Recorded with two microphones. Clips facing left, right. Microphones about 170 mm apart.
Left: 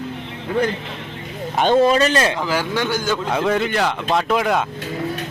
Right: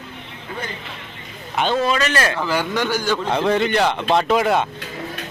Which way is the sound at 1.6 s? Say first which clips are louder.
Left 5 dB; 40° left (ahead or behind).